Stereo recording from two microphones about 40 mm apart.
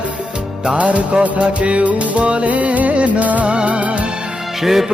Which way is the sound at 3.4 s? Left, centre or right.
Right.